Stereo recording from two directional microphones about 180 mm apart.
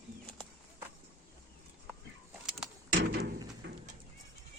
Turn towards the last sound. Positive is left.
turn(degrees=-70)  # may be behind; listen again after turning